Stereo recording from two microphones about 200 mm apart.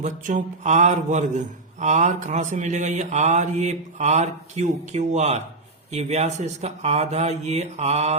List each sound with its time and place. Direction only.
0.0 s mantra: 40° right (ahead or behind)